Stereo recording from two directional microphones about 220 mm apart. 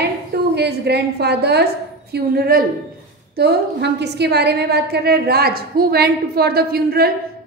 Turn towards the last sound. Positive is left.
turn(degrees=-45)  # may be behind; listen again after turning